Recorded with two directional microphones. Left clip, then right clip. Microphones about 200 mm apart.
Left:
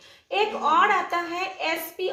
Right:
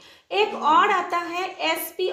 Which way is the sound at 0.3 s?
30° right (ahead or behind).